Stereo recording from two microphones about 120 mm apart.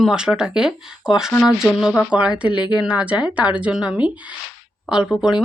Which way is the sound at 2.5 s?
40° left (ahead or behind).